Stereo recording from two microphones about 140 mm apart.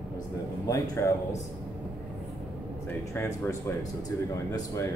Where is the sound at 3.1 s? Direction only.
20° left (ahead or behind).